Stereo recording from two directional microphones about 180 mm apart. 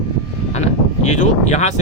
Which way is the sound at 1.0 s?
40° left (ahead or behind).